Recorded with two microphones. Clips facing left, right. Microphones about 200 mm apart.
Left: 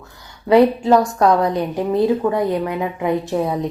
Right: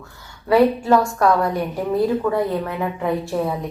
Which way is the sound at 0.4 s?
20° left (ahead or behind).